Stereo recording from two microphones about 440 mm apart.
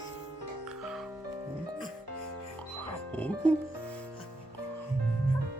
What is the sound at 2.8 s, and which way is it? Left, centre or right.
Music, centre.